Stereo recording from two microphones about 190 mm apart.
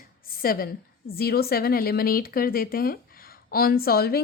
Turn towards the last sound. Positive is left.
turn(degrees=55)  # may be behind; listen again after turning